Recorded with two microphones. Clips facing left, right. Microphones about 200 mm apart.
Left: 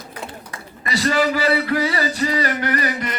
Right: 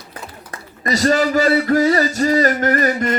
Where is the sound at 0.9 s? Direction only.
45° right (ahead or behind).